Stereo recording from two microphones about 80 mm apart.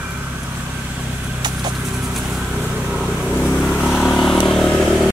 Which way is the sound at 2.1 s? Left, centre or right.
Centre.